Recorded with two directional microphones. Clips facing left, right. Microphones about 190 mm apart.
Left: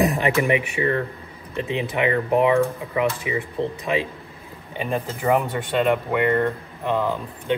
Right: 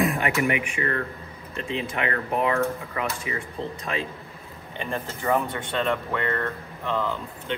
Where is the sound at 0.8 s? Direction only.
20° left (ahead or behind).